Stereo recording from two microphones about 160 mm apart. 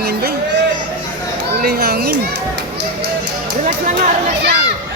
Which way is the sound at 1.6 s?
85° right.